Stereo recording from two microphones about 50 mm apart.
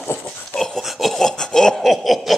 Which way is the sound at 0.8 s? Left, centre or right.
Centre.